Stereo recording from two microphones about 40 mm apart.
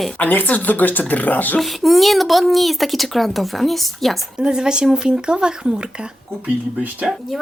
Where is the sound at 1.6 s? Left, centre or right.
Centre.